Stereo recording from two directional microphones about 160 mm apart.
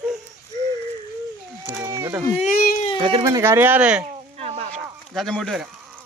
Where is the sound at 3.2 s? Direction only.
20° right (ahead or behind).